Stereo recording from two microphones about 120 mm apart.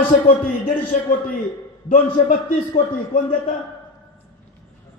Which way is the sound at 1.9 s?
90° left.